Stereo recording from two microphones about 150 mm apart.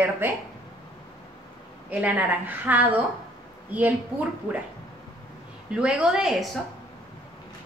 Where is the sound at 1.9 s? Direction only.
10° right (ahead or behind).